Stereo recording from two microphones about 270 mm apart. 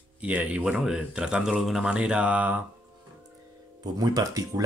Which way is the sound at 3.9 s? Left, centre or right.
Centre.